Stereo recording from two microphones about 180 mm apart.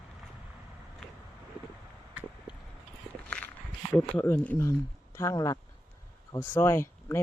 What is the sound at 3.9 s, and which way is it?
Speech, 10° left (ahead or behind).